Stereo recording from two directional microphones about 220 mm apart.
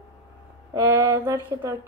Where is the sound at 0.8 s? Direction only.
10° right (ahead or behind).